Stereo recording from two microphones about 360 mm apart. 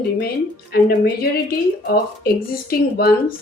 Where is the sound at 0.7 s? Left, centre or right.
Left.